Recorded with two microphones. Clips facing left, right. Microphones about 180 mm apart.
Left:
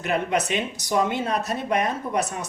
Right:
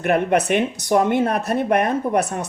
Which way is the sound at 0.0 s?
55° right (ahead or behind).